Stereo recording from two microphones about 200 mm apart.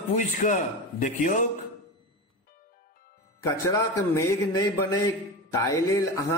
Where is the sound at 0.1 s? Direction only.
40° left (ahead or behind).